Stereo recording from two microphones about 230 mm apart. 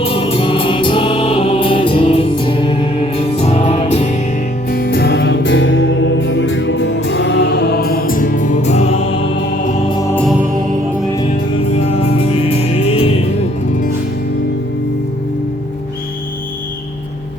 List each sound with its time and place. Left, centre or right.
0.0 s music: left
4.7 s music: left
11.7 s music: left